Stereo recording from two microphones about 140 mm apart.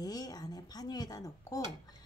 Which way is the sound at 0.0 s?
30° left (ahead or behind).